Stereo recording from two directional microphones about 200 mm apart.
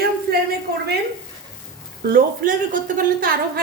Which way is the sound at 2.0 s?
45° right (ahead or behind).